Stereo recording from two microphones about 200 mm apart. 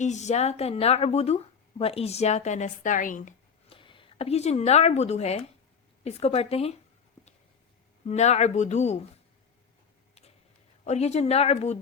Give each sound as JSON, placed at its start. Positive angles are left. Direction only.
{"t": 0.0, "sound": "speech", "side_deg": 35}
{"t": 3.7, "sound": "speech", "side_deg": 25}
{"t": 8.0, "sound": "speech", "side_deg": 35}
{"t": 10.8, "sound": "speech", "side_deg": 35}